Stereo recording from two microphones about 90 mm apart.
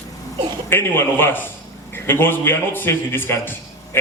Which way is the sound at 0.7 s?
25° left (ahead or behind).